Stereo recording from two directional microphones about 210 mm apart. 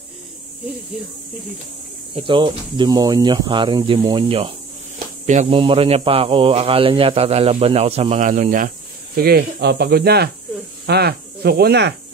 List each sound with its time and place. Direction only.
0.9 s speech: 5° right (ahead or behind)
2.1 s speech: 25° right (ahead or behind); by 11.9 s 50° right (ahead or behind)